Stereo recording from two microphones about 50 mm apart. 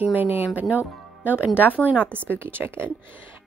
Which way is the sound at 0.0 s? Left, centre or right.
Right.